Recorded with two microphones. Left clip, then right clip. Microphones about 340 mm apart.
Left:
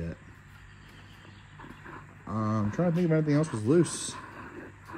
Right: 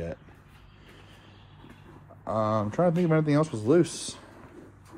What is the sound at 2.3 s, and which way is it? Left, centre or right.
Speech, right.